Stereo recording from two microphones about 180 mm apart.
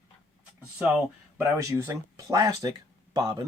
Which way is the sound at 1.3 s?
15° right (ahead or behind).